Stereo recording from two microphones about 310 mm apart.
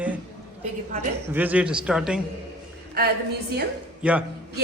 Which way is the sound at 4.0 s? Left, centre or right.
Centre.